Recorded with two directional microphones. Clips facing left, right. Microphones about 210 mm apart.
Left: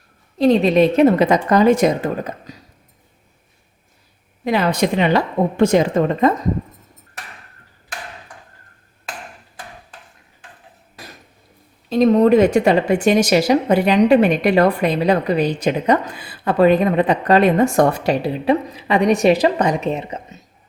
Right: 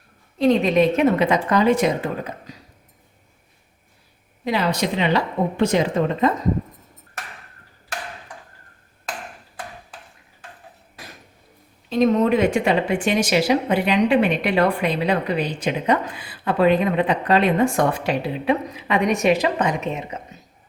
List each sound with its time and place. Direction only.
0.3 s speech: 35° left (ahead or behind)
4.4 s a woman's voice: 50° left (ahead or behind)
11.9 s speech: 35° left (ahead or behind)